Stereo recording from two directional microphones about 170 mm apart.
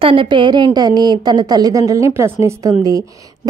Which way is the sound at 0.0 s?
30° right (ahead or behind).